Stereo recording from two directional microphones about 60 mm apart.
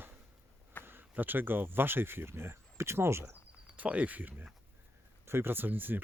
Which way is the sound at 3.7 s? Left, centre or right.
Right.